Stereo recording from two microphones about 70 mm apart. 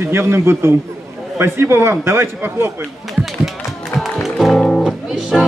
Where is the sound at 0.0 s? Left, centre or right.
Right.